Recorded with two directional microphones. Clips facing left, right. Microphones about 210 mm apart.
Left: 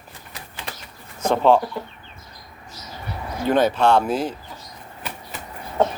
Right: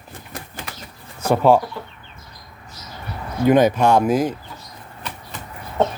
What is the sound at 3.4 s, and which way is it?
Speech, 15° right (ahead or behind).